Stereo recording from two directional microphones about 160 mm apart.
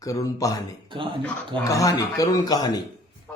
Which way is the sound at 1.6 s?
20° left (ahead or behind).